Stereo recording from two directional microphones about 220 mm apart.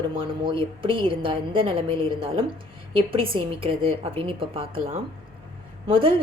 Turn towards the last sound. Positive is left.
turn(degrees=-25)  # may be behind; listen again after turning